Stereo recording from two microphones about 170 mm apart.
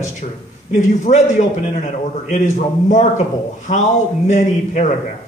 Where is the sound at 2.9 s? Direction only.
45° left (ahead or behind).